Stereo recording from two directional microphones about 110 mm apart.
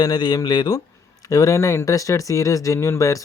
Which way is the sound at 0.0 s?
40° left (ahead or behind).